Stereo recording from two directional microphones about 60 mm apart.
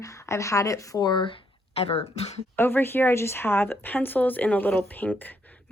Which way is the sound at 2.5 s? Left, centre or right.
Left.